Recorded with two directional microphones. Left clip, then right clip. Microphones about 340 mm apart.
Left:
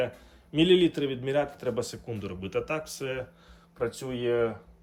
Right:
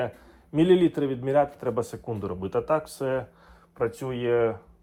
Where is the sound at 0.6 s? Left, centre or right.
Centre.